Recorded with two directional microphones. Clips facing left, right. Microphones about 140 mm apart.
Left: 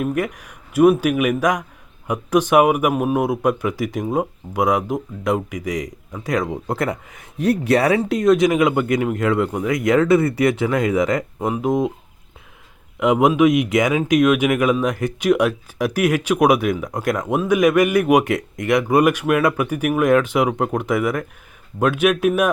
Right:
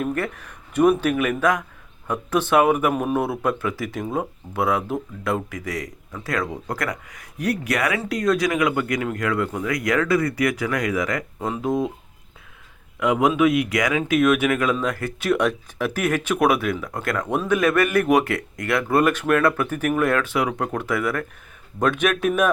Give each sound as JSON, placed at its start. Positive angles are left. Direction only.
{"t": 0.0, "sound": "speech", "side_deg": 10}
{"t": 13.0, "sound": "speech", "side_deg": 20}